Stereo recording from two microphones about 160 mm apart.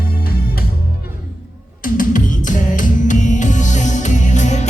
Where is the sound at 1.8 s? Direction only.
55° left (ahead or behind).